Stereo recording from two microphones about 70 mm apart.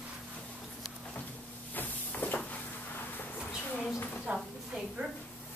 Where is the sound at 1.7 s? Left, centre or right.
Left.